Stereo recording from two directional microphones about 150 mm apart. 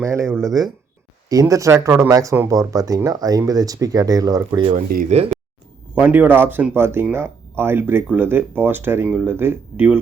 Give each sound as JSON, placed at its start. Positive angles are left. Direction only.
{"t": 0.0, "sound": "speech", "side_deg": -20}
{"t": 1.3, "sound": "speech", "side_deg": -20}
{"t": 4.7, "sound": "speech", "side_deg": -75}
{"t": 5.0, "sound": "speech", "side_deg": -45}
{"t": 5.9, "sound": "speech", "side_deg": -10}